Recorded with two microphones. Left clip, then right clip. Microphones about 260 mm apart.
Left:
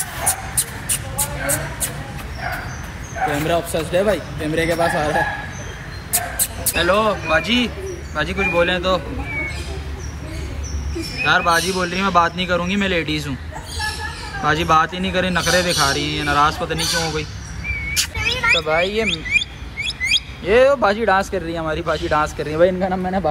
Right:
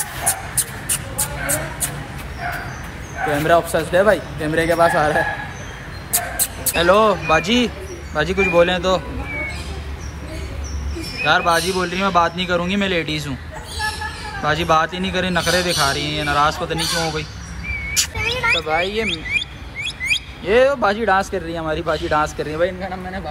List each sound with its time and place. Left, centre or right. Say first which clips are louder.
1.2 s a sound: left 1 dB; centre
3.4 s speech: right 4 dB; centre
6.7 s speech: right 3 dB; centre
11.2 s a man's voice: even; centre
14.4 s a man's voice: left 1 dB; centre
18.0 s a sound: right 2 dB; centre
18.7 s speech: left 1 dB; centre
19.0 s speech: left 2 dB; right
20.1 s speech: left 1 dB; centre
22.6 s a man's voice: left 7 dB; centre